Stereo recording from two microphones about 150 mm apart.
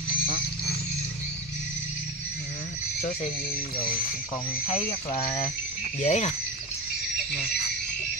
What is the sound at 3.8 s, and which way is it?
Speech, 70° left (ahead or behind).